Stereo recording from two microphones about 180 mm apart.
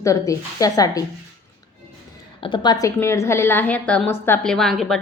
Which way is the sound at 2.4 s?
25° left (ahead or behind).